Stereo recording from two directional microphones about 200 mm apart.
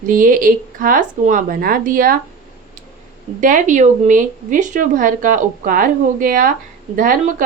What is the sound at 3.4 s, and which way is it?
Speech, 40° right (ahead or behind).